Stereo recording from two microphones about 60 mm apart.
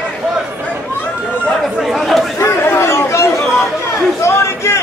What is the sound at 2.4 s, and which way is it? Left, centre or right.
Chatter, left.